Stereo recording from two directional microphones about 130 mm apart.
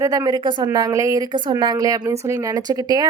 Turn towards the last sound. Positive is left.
turn(degrees=-30)  # may be behind; listen again after turning